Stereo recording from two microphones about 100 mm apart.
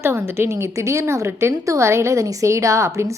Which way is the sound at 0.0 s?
25° right (ahead or behind).